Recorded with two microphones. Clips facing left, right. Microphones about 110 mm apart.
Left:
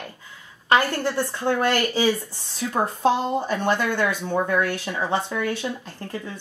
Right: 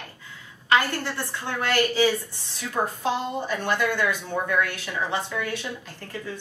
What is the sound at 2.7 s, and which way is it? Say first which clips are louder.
Speech: left 4 dB; 35° left (ahead or behind).